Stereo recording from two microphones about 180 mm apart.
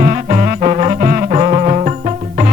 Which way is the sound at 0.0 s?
40° right (ahead or behind).